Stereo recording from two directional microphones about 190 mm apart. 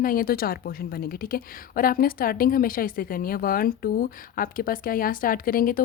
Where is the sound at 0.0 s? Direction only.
50° left (ahead or behind).